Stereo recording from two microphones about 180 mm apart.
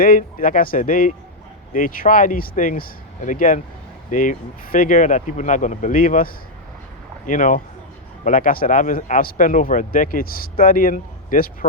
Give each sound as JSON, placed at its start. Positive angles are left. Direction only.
{"t": 0.0, "sound": "speech", "side_deg": 50}